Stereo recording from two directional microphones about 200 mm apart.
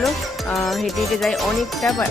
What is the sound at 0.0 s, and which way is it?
Speech, centre (ahead or behind).